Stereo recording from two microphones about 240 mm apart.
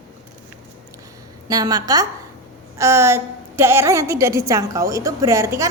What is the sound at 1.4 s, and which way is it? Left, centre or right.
A woman's voice, centre.